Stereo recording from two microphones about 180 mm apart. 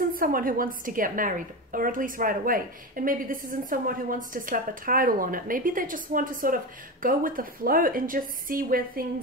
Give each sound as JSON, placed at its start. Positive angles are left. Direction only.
{"t": 0.1, "sound": "a woman's voice", "side_deg": -50}